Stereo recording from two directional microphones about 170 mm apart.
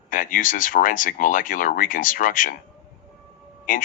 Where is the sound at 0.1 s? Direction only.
50° left (ahead or behind).